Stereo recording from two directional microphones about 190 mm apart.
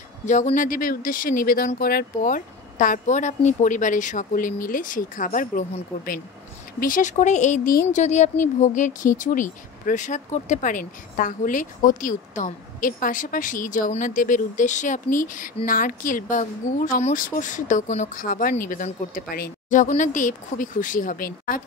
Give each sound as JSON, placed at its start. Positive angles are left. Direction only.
{"t": 0.3, "sound": "speech", "side_deg": 40}